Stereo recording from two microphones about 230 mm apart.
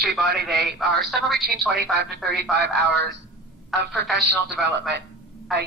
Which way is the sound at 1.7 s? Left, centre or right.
Right.